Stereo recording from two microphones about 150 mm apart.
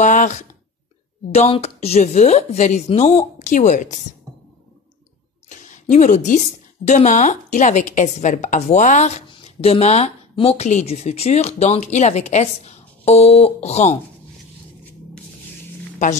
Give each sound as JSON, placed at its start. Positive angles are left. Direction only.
{"t": 0.0, "sound": "speech", "side_deg": 55}
{"t": 5.6, "sound": "a woman's voice", "side_deg": 50}